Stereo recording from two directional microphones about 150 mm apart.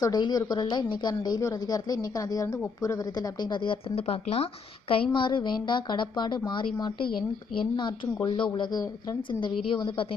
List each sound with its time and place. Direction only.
0.0 s a woman's voice: 25° left (ahead or behind)